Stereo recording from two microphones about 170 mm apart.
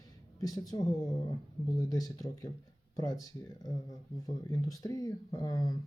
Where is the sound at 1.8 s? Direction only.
20° left (ahead or behind).